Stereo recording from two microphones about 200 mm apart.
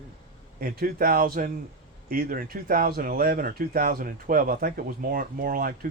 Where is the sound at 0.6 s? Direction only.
45° right (ahead or behind).